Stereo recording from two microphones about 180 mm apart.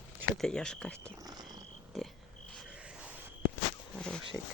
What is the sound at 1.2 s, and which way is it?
Frog, 20° right (ahead or behind).